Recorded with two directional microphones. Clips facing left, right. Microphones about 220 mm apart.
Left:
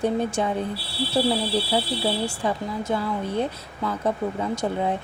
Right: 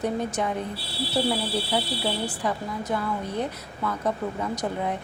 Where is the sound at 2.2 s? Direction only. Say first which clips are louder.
Left 2 dB; 25° left (ahead or behind).